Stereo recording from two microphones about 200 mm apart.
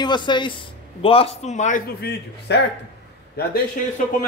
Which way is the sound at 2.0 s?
55° left (ahead or behind).